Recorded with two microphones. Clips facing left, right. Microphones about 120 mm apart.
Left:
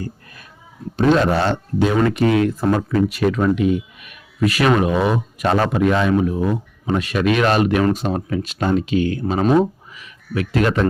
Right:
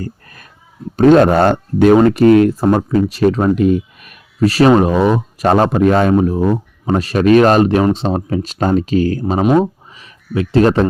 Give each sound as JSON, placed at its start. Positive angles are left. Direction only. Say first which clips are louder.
{"t": 0.9, "sound": "speech", "louder": "right 7 dB", "side_deg": -50}
{"t": 2.0, "sound": "speech", "louder": "right 7 dB", "side_deg": -40}
{"t": 2.7, "sound": "speech", "louder": "right 4 dB", "side_deg": -35}
{"t": 9.4, "sound": "speech", "louder": "right 3 dB", "side_deg": -15}
{"t": 9.9, "sound": "a sound", "louder": "right 4 dB", "side_deg": -30}